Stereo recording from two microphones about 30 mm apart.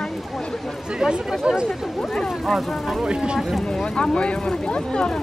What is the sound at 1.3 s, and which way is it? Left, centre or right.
Speech, centre.